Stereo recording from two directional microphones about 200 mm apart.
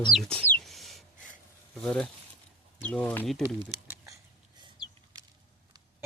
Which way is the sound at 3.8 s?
15° right (ahead or behind).